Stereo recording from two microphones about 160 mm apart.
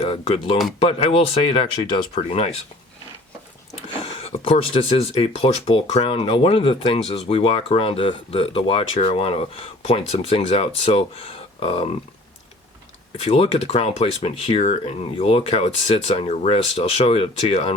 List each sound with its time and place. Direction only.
0.0 s speech: 35° left (ahead or behind)
4.0 s speech: 35° left (ahead or behind)
13.1 s speech: 40° left (ahead or behind)